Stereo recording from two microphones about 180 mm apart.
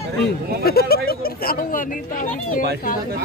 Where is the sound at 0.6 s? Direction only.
60° left (ahead or behind).